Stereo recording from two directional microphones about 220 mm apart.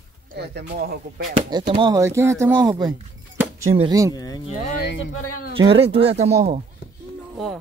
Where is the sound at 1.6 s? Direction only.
25° right (ahead or behind).